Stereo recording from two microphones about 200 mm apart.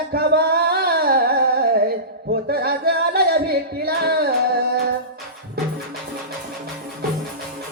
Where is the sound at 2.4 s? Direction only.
50° right (ahead or behind).